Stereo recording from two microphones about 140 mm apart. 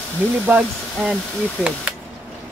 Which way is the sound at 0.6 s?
Centre (ahead or behind).